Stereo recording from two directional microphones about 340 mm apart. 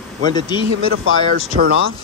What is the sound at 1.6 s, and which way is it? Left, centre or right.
Speech, right.